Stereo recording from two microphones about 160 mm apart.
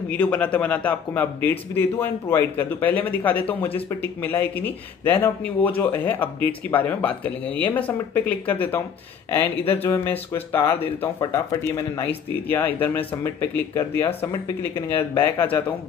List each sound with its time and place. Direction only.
0.2 s a man's voice: 10° left (ahead or behind)